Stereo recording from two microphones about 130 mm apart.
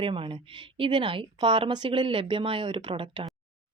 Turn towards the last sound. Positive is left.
turn(degrees=-40)  # may be behind; listen again after turning